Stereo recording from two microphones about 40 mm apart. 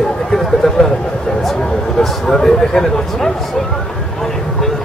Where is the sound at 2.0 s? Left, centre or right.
Centre.